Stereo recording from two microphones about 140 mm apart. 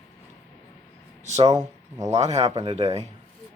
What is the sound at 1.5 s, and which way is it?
Speech, 25° right (ahead or behind).